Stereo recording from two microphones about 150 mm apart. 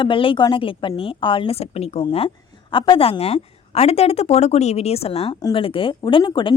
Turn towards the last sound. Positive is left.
turn(degrees=30)  # may be behind; listen again after turning